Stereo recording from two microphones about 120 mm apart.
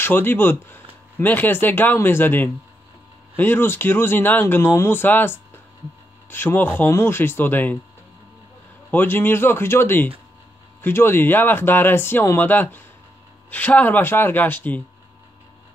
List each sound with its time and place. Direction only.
0.0 s speech: 15° left (ahead or behind)
8.9 s speech: 15° left (ahead or behind)